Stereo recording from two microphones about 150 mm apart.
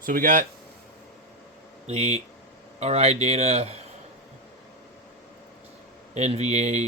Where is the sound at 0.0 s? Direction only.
65° right (ahead or behind).